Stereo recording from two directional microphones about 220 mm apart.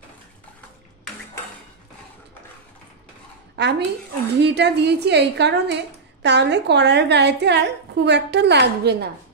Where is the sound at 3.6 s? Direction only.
50° right (ahead or behind).